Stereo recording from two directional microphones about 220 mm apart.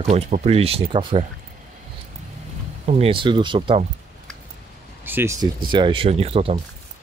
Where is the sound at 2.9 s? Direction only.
25° right (ahead or behind).